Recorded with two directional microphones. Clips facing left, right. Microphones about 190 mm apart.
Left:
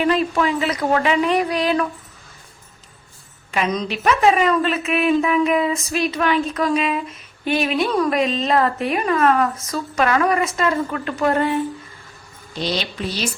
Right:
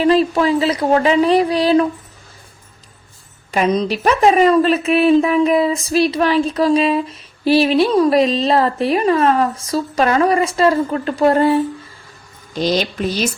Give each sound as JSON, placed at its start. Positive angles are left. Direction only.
{"t": 0.0, "sound": "a woman's voice", "side_deg": -30}
{"t": 3.5, "sound": "a woman's voice", "side_deg": -35}
{"t": 12.5, "sound": "speech", "side_deg": -45}